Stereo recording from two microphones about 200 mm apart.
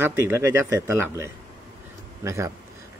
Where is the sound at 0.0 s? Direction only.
15° right (ahead or behind).